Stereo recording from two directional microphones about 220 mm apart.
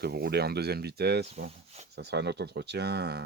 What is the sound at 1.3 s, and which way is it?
Speech, 30° right (ahead or behind).